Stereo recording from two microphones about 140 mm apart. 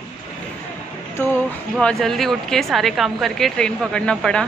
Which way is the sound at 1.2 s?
15° left (ahead or behind).